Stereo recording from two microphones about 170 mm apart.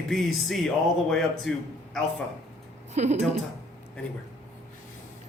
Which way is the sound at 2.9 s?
40° right (ahead or behind).